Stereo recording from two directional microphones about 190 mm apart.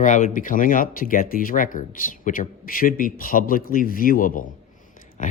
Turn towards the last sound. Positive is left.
turn(degrees=40)  # may be behind; listen again after turning